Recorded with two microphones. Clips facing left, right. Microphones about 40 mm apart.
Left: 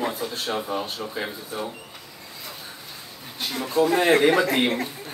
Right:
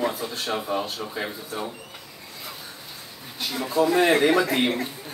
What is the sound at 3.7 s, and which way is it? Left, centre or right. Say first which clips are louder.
Speech: even; left.